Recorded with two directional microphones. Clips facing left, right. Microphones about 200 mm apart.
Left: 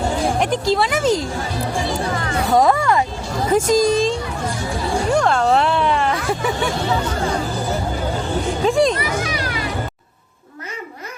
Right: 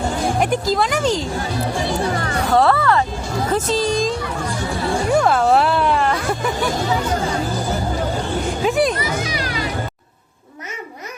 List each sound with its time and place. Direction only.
0.3 s speech: centre (ahead or behind)
2.5 s speech: 15° left (ahead or behind)
5.1 s speech: 5° right (ahead or behind)
8.6 s music: 5° right (ahead or behind)
9.0 s music: 20° right (ahead or behind)